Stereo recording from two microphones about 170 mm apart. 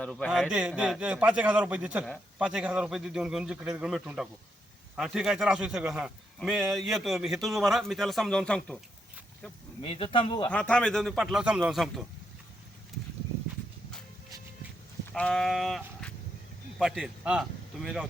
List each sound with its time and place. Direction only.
0.0 s a man's voice: 5° left (ahead or behind)
0.3 s a man's voice: 5° right (ahead or behind)
9.8 s speech: 35° left (ahead or behind)
10.5 s a man's voice: 5° left (ahead or behind)
15.1 s a sound: 5° left (ahead or behind)
16.7 s a man's voice: centre (ahead or behind)